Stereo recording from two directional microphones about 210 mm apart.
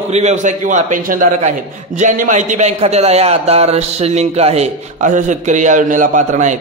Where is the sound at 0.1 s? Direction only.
30° right (ahead or behind).